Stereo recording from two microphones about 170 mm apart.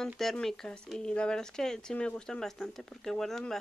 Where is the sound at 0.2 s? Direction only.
Centre (ahead or behind).